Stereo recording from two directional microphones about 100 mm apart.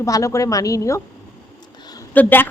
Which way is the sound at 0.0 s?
30° left (ahead or behind).